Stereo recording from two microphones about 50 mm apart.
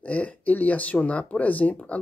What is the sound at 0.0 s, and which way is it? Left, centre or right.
Speech, left.